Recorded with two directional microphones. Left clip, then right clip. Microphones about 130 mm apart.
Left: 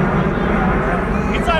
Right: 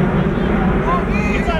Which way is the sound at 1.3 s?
45° left (ahead or behind).